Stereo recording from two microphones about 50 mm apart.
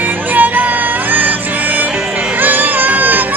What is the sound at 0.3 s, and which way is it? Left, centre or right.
Music, right.